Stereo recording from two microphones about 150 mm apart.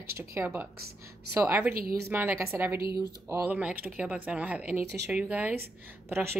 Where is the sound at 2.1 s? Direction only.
15° right (ahead or behind).